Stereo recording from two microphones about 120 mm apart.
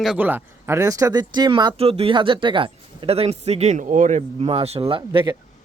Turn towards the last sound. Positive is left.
turn(degrees=-45)  # may be behind; listen again after turning